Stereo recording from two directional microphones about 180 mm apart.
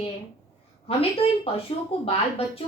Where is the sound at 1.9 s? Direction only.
30° left (ahead or behind).